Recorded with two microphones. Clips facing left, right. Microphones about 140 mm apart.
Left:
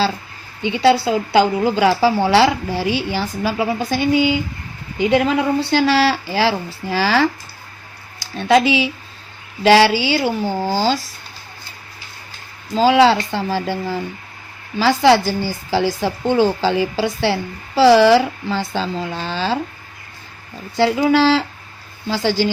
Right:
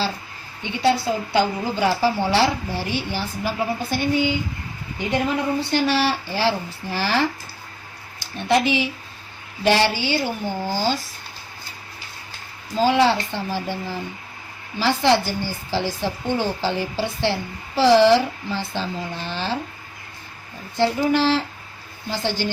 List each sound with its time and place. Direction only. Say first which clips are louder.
0.6 s a woman's voice: left 6 dB; 90° left
8.4 s a woman's voice: left 5 dB; 90° left
12.7 s a woman's voice: left 5 dB; 90° left
14.8 s a woman's voice: left 5 dB; 90° left
20.7 s a woman's voice: left 5 dB; 90° left